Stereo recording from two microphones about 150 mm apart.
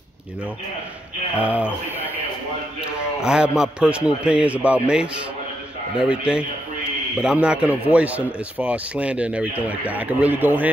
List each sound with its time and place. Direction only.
1.4 s speech: 10° right (ahead or behind)
3.2 s a man's voice: 5° right (ahead or behind)